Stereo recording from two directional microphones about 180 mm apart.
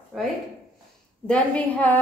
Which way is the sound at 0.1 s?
Centre (ahead or behind).